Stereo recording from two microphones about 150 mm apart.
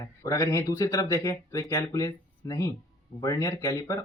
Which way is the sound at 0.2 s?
20° left (ahead or behind).